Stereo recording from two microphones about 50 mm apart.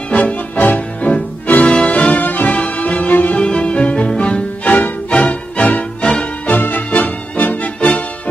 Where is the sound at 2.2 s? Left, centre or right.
Left.